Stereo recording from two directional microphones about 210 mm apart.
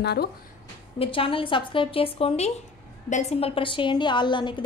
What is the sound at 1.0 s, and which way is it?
A woman's voice, 25° left (ahead or behind).